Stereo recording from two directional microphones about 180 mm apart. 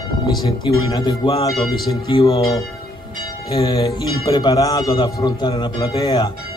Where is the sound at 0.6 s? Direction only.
25° left (ahead or behind).